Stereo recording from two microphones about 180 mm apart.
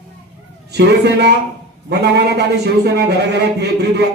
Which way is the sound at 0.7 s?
65° right (ahead or behind).